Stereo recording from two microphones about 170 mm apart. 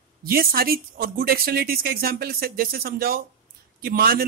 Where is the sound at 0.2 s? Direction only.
60° right (ahead or behind).